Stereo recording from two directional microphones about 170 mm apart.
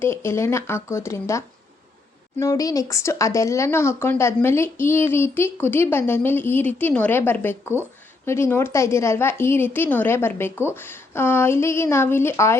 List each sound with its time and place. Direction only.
0.0 s speech: 15° left (ahead or behind)